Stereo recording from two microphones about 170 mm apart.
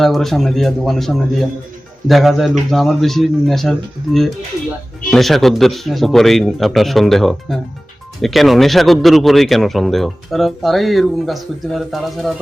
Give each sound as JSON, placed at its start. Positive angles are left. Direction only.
{"t": 0.0, "sound": "a man's voice", "side_deg": 0}